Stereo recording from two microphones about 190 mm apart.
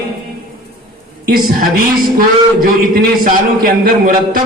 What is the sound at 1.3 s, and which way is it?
A man's voice, 50° right (ahead or behind).